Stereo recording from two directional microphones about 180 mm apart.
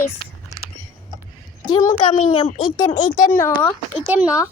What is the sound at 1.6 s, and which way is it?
Speech, 20° left (ahead or behind).